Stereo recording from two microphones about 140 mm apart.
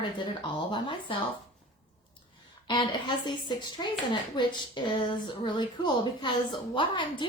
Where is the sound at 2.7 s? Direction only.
35° left (ahead or behind).